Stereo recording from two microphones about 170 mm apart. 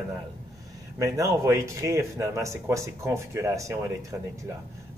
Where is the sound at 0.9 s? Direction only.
20° right (ahead or behind).